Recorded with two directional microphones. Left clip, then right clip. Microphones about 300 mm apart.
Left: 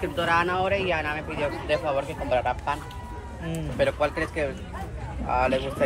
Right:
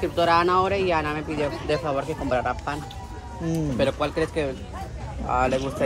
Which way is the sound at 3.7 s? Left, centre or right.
Right.